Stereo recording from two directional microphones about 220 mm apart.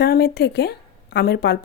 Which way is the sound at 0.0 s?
45° left (ahead or behind).